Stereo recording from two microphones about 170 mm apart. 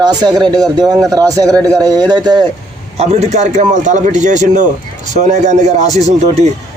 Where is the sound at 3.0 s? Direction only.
40° right (ahead or behind).